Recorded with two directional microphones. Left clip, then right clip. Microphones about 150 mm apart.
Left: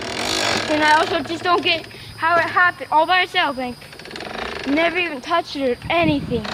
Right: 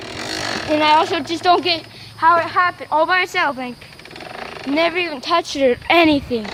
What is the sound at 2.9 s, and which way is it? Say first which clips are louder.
Speech: right 2 dB; 35° right (ahead or behind).